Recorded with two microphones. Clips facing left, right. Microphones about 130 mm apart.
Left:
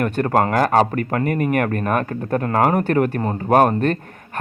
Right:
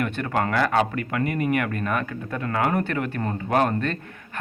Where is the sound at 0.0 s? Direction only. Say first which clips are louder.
Left 7 dB; 45° left (ahead or behind).